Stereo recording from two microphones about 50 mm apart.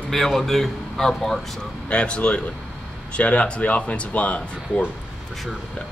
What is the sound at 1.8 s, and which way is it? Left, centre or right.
Speech, left.